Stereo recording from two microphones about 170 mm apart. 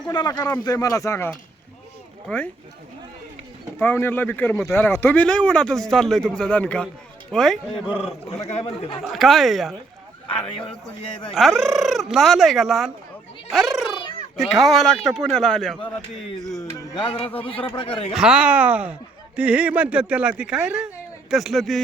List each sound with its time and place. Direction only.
0.1 s speech: 25° left (ahead or behind); by 2.5 s 10° left (ahead or behind)
3.8 s speech: 10° left (ahead or behind)
8.3 s speech: 40° left (ahead or behind)
9.0 s fowl: centre (ahead or behind)
11.2 s fowl: centre (ahead or behind)
13.5 s a child's voice: centre (ahead or behind)
14.3 s fowl: centre (ahead or behind)
17.0 s speech: 35° left (ahead or behind)
18.1 s speech: 5° right (ahead or behind)
20.4 s fowl: 5° right (ahead or behind)